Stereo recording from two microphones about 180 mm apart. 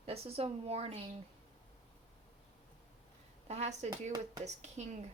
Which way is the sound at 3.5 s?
40° right (ahead or behind).